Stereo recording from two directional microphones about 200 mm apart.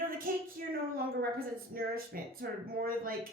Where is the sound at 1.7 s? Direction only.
45° right (ahead or behind).